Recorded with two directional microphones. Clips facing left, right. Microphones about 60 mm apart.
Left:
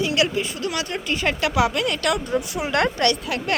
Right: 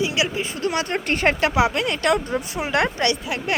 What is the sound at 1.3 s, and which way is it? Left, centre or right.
Speech, right.